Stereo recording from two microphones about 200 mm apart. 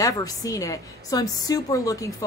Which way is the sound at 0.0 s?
20° left (ahead or behind).